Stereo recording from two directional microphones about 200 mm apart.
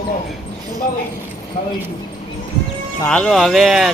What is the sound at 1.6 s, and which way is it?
Speech, 35° left (ahead or behind).